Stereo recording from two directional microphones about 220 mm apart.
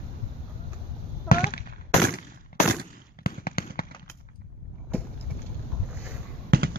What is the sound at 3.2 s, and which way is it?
Fireworks, 45° left (ahead or behind).